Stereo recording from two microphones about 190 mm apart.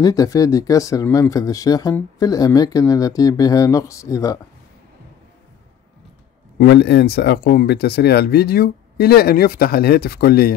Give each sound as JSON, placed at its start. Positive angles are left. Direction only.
{"t": 0.0, "sound": "speech", "side_deg": 20}
{"t": 6.6, "sound": "speech", "side_deg": 60}